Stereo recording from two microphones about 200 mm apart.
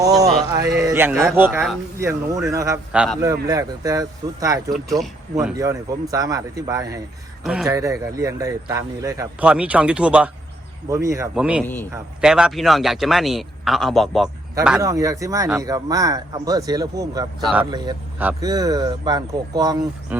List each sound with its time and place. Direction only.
0.5 s a man's voice: 15° right (ahead or behind)
2.9 s a man's voice: 5° right (ahead or behind)
3.2 s a man's voice: 15° right (ahead or behind)
4.7 s a man's voice: centre (ahead or behind)
5.5 s a man's voice: 15° right (ahead or behind)
7.4 s a man's voice: centre (ahead or behind)
7.7 s a man's voice: 15° right (ahead or behind)
11.6 s a man's voice: 10° left (ahead or behind)
12.2 s a man's voice: 5° right (ahead or behind)
14.8 s a man's voice: 15° right (ahead or behind)
17.4 s a man's voice: 5° right (ahead or behind)
17.7 s speech: 20° right (ahead or behind)
18.2 s a man's voice: 10° right (ahead or behind)
20.1 s a man's voice: 5° right (ahead or behind)